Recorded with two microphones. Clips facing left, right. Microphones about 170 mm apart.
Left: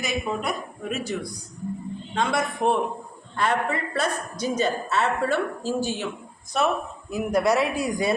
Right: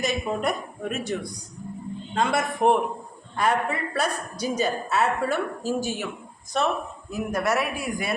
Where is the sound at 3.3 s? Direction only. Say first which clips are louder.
Even; 10° right (ahead or behind).